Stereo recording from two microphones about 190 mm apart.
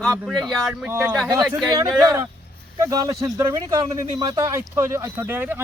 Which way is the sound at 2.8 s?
20° right (ahead or behind).